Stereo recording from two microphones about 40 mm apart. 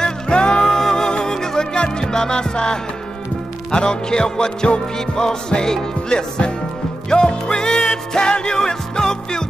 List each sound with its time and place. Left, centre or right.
0.3 s music: left
0.7 s music: centre